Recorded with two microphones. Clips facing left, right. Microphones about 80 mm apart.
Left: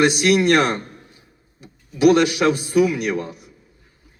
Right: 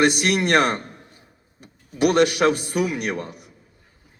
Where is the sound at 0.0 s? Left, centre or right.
Right.